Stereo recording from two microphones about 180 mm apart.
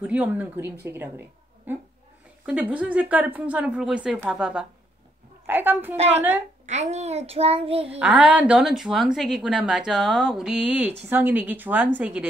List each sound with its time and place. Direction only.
0.0 s speech: 10° right (ahead or behind)
5.9 s a child's voice: 35° right (ahead or behind)
8.0 s speech: 10° right (ahead or behind)